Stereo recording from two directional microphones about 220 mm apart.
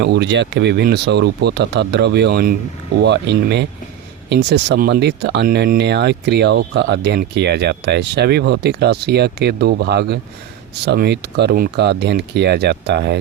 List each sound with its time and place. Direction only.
0.0 s speech: 50° right (ahead or behind)